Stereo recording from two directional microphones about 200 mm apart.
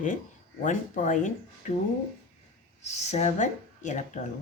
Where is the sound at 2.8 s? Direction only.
35° left (ahead or behind).